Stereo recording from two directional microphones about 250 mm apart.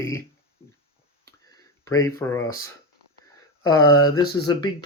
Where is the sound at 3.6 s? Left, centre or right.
Centre.